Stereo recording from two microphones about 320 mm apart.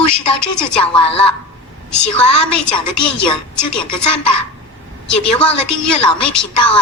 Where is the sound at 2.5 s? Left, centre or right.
Left.